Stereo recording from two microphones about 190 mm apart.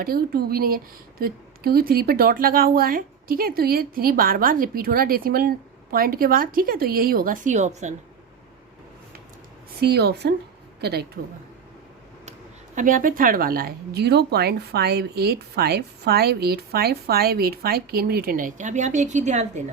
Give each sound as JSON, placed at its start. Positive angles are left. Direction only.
{"t": 0.0, "sound": "speech", "side_deg": -50}
{"t": 9.8, "sound": "speech", "side_deg": -60}
{"t": 12.7, "sound": "speech", "side_deg": -45}